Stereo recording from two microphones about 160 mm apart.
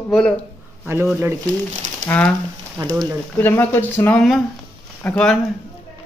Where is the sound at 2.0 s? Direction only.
10° left (ahead or behind).